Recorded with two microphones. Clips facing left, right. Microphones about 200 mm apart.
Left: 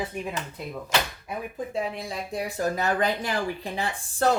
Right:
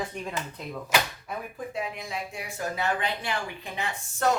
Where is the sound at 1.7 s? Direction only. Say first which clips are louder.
Left 3 dB; 35° left (ahead or behind).